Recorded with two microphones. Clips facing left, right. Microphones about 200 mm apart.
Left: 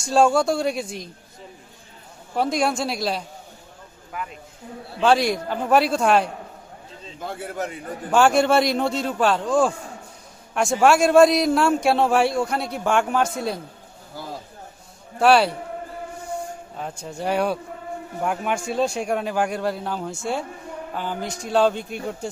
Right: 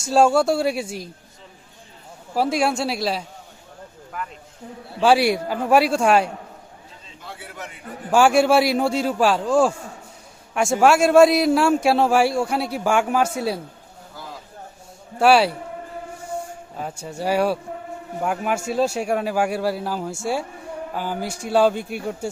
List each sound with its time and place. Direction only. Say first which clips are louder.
0.0 s a man's voice: right 1 dB; 5° right (ahead or behind)
2.3 s a man's voice: right 1 dB; 5° right (ahead or behind)
4.9 s a man's voice: right 2 dB; 10° right (ahead or behind)
7.2 s a man's voice: left 8 dB; 45° left (ahead or behind)
8.1 s a man's voice: right 2 dB; 10° right (ahead or behind)
15.2 s a man's voice: right 1 dB; 5° right (ahead or behind)
16.7 s a man's voice: right 3 dB; 5° right (ahead or behind)